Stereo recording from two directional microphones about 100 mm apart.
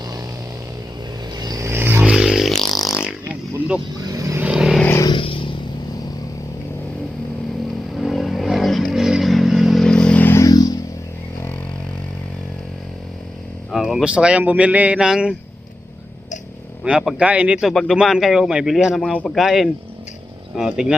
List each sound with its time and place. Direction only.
1.4 s vehicle: 35° right (ahead or behind)
1.7 s a sound: 20° right (ahead or behind); by 3.0 s centre (ahead or behind)
4.1 s vehicle: 35° right (ahead or behind)
4.4 s vehicle: 10° right (ahead or behind)
5.0 s vehicle: 60° left (ahead or behind)
7.9 s vehicle: centre (ahead or behind)
10.3 s a sound: 40° left (ahead or behind)
13.7 s speech: 5° right (ahead or behind)
16.8 s speech: 10° right (ahead or behind)
19.1 s speech: 10° left (ahead or behind)
19.4 s speech: centre (ahead or behind)